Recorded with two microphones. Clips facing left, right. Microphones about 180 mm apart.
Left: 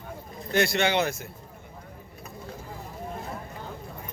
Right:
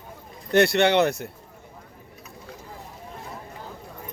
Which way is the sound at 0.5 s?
65° right (ahead or behind).